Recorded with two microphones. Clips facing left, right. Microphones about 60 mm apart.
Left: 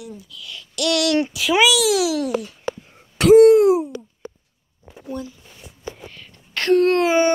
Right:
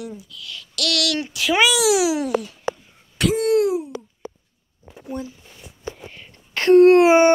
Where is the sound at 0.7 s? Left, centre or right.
Left.